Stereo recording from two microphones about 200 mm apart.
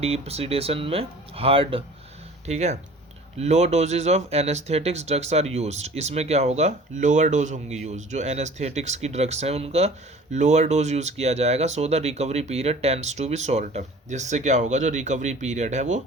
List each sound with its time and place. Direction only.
0.0 s speech: 30° right (ahead or behind)